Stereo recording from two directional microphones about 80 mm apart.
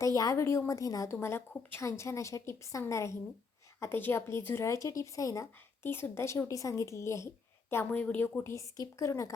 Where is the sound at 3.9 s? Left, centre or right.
Left.